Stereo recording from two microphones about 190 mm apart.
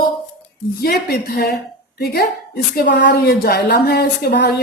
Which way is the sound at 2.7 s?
55° left (ahead or behind).